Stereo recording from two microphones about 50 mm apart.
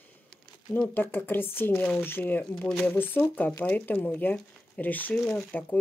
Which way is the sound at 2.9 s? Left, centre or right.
Left.